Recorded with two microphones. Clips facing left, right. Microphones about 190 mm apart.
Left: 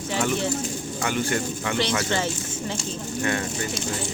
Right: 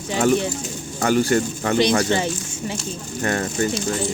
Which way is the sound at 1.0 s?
40° right (ahead or behind).